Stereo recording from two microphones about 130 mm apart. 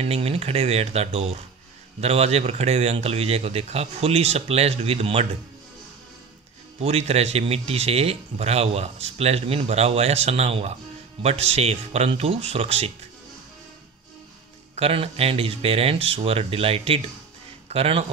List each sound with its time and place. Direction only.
0.0 s speech: 50° right (ahead or behind)
6.8 s speech: 50° right (ahead or behind)
14.8 s speech: 50° right (ahead or behind)